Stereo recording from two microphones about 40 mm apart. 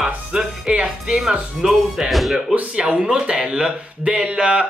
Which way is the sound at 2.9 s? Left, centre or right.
Centre.